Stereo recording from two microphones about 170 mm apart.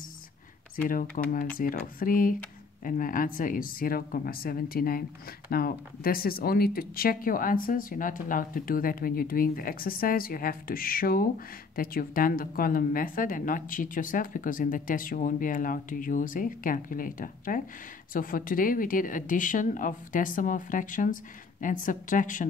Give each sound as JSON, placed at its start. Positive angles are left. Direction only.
{"t": 0.8, "sound": "speech", "side_deg": 55}